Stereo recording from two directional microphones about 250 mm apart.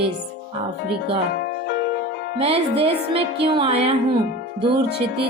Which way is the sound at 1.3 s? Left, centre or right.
Left.